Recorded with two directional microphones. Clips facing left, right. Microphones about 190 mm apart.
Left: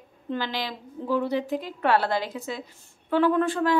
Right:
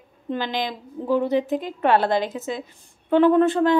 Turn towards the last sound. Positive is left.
turn(degrees=-25)  # may be behind; listen again after turning